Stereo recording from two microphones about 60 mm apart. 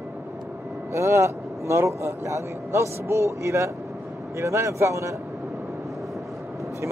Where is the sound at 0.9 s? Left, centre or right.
Right.